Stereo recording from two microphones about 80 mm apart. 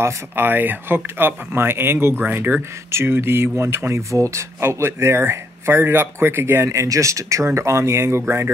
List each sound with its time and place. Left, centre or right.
0.0 s speech: right